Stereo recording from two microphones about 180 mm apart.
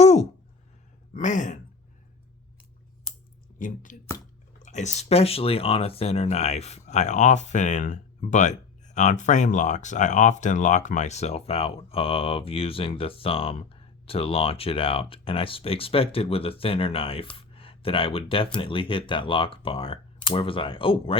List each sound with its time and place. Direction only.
0.0 s a sound: 40° left (ahead or behind)
1.1 s speech: 45° left (ahead or behind)
3.6 s speech: 45° left (ahead or behind); by 21.2 s 30° left (ahead or behind)